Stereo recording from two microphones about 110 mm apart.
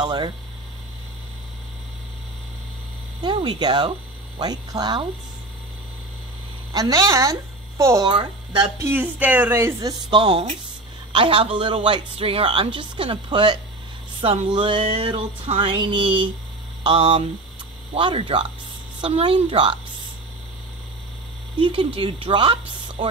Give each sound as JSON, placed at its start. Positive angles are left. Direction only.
{"t": 0.0, "sound": "speech", "side_deg": -40}
{"t": 3.3, "sound": "speech", "side_deg": -45}
{"t": 6.7, "sound": "a woman's voice", "side_deg": -35}
{"t": 8.0, "sound": "speech", "side_deg": -45}
{"t": 8.7, "sound": "a woman's voice", "side_deg": -20}
{"t": 9.8, "sound": "speech", "side_deg": -35}
{"t": 11.1, "sound": "speech", "side_deg": -50}
{"t": 21.5, "sound": "speech", "side_deg": -50}